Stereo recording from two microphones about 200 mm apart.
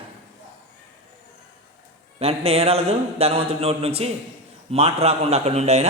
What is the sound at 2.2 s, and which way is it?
A man's voice, 30° right (ahead or behind).